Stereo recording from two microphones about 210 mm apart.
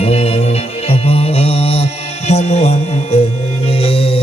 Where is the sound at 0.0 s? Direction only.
30° left (ahead or behind).